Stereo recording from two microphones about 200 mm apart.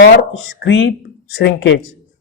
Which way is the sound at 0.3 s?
65° left (ahead or behind).